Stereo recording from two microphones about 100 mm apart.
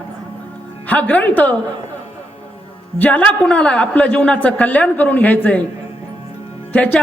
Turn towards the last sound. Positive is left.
turn(degrees=15)  # may be behind; listen again after turning